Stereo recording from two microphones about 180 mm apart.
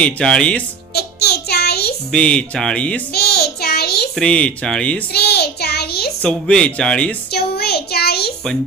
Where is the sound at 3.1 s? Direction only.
60° left (ahead or behind).